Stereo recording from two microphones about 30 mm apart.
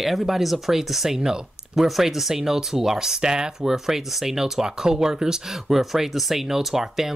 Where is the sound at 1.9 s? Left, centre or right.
Centre.